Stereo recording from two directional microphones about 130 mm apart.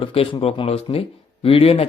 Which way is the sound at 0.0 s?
45° left (ahead or behind).